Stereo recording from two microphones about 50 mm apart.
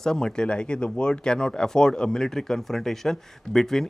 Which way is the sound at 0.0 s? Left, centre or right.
Centre.